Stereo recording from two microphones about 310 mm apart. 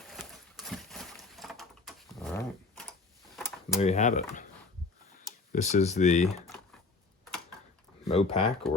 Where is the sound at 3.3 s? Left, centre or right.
Centre.